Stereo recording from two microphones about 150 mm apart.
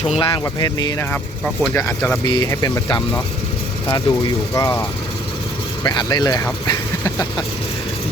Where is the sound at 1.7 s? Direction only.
10° left (ahead or behind).